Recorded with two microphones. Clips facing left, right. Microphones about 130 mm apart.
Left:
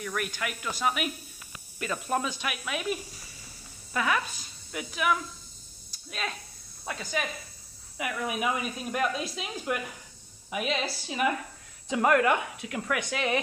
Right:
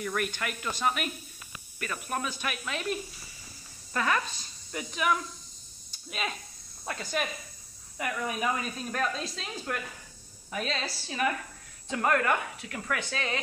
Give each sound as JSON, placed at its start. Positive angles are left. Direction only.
{"t": 0.0, "sound": "speech", "side_deg": 0}
{"t": 1.8, "sound": "speech", "side_deg": 20}
{"t": 5.9, "sound": "a sound", "side_deg": -5}
{"t": 6.9, "sound": "speech", "side_deg": 0}